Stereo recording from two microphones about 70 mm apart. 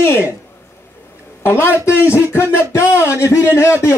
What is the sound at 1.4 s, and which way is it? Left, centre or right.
A woman's voice, left.